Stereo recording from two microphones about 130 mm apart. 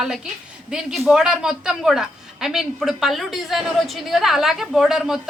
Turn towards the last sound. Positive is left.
turn(degrees=-5)  # may be behind; listen again after turning